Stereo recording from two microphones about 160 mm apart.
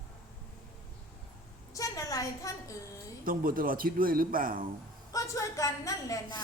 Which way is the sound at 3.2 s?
65° right (ahead or behind).